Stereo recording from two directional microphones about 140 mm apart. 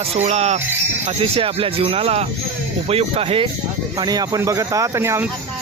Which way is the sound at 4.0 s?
30° right (ahead or behind).